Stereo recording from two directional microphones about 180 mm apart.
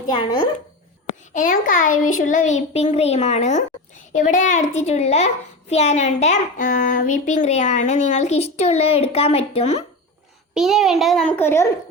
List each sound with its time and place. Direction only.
0.1 s speech: 25° left (ahead or behind)
1.3 s a child's voice: 45° left (ahead or behind)
10.5 s a child's voice: 5° right (ahead or behind); by 11.7 s 15° left (ahead or behind)